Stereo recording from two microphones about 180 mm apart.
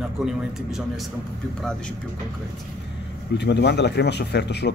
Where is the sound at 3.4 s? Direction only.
70° left (ahead or behind).